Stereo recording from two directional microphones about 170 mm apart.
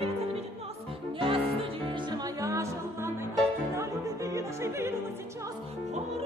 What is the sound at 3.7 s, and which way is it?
Opera, 15° right (ahead or behind).